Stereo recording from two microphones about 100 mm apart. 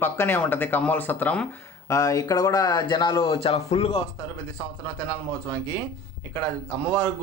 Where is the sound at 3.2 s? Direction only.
75° left (ahead or behind).